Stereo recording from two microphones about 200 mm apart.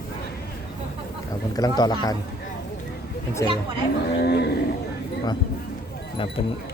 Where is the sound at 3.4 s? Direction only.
15° left (ahead or behind).